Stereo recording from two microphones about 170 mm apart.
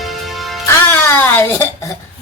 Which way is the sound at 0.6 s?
15° left (ahead or behind).